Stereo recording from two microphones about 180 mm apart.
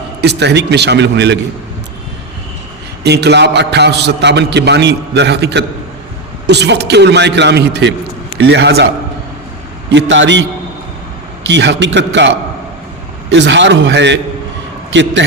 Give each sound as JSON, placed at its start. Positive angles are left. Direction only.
{"t": 0.2, "sound": "a man's voice", "side_deg": -70}
{"t": 3.0, "sound": "a man's voice", "side_deg": -70}
{"t": 9.9, "sound": "a man's voice", "side_deg": -90}
{"t": 11.4, "sound": "a man's voice", "side_deg": -80}
{"t": 13.3, "sound": "a man's voice", "side_deg": -85}